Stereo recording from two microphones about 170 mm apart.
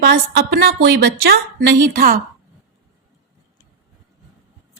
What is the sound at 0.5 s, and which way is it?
Speech, 65° right (ahead or behind).